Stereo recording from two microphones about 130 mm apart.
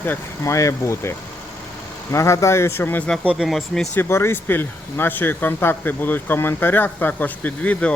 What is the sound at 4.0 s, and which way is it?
Speech, 20° left (ahead or behind).